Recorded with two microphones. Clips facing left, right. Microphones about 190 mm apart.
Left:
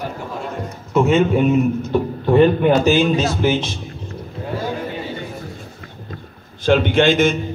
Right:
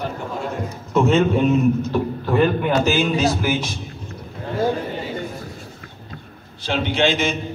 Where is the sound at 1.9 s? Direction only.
20° left (ahead or behind).